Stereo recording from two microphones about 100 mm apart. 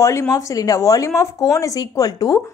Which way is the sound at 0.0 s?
30° left (ahead or behind).